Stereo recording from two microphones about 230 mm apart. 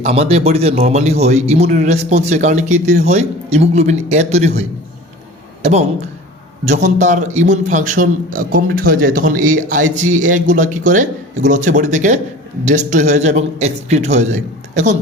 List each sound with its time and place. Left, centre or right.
0.0 s speech: right
6.7 s a man's voice: right